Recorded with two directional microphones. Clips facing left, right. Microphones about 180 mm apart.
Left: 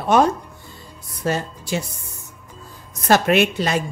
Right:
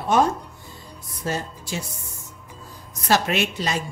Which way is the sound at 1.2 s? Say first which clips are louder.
Left 5 dB; 65° left (ahead or behind).